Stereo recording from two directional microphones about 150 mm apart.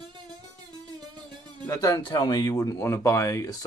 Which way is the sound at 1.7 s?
25° left (ahead or behind).